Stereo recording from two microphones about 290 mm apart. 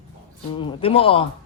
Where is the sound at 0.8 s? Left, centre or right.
Centre.